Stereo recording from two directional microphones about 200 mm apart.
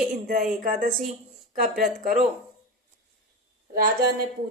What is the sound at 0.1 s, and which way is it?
Speech, 45° right (ahead or behind).